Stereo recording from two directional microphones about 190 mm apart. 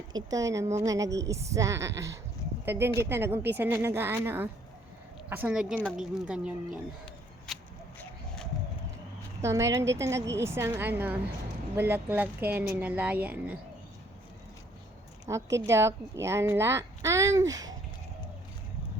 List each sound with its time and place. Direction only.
0.1 s a woman's voice: 20° right (ahead or behind); by 6.5 s 5° right (ahead or behind)
7.0 s a sound: 5° left (ahead or behind)
9.4 s a woman's voice: 15° right (ahead or behind)
15.3 s a woman's voice: 15° right (ahead or behind)